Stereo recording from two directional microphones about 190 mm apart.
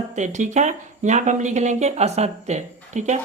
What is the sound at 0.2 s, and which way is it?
Speech, 40° right (ahead or behind).